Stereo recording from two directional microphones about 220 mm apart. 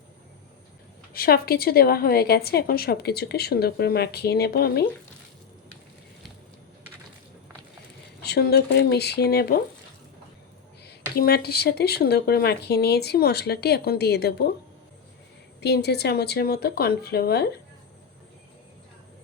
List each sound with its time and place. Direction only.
1.1 s a woman's voice: 45° left (ahead or behind)
8.2 s a woman's voice: 50° left (ahead or behind)
11.1 s a woman's voice: 45° left (ahead or behind)
15.6 s a woman's voice: 50° left (ahead or behind)